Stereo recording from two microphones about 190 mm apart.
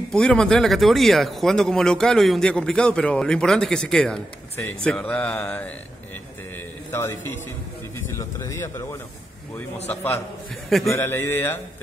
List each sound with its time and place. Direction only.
0.1 s speech: 5° left (ahead or behind)
6.9 s a man's voice: 10° left (ahead or behind)
8.2 s speech: 15° left (ahead or behind)
9.8 s speech: 10° left (ahead or behind)
10.7 s speech: centre (ahead or behind)
11.0 s speech: 10° left (ahead or behind)